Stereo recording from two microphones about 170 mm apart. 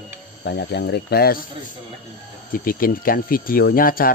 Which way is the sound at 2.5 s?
55° left (ahead or behind).